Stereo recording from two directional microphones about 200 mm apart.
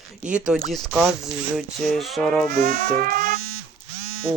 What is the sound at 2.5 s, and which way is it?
Speech, 50° right (ahead or behind).